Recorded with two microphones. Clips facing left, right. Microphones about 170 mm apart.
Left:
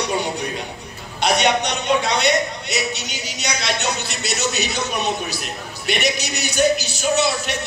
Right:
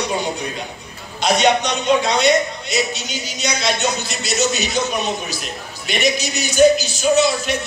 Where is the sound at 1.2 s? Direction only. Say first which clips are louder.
Right 2 dB; 65° left (ahead or behind).